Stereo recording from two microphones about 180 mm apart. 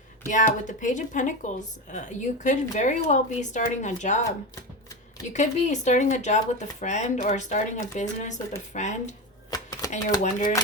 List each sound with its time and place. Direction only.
0.3 s speech: 45° left (ahead or behind)
5.3 s speech: 40° left (ahead or behind)
9.5 s typewriter: 20° left (ahead or behind)